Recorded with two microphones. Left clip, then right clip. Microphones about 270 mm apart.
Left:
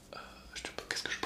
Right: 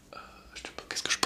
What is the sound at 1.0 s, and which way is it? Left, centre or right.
Whispering, right.